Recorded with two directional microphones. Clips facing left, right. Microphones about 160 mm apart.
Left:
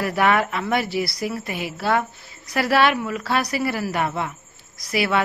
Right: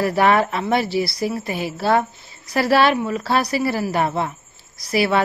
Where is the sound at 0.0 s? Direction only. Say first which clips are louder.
Right 3 dB; 30° right (ahead or behind).